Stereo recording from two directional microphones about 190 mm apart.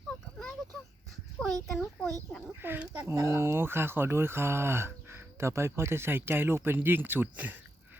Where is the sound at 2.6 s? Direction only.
10° right (ahead or behind).